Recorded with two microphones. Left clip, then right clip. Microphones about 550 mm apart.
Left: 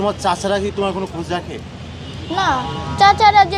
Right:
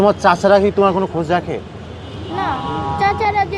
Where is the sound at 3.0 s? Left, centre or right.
Left.